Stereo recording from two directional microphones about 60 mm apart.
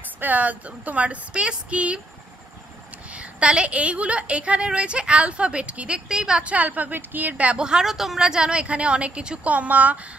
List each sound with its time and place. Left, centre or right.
0.2 s a woman's voice: right
3.2 s a woman's voice: centre